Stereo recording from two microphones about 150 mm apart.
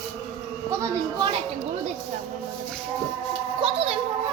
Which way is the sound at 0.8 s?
35° right (ahead or behind).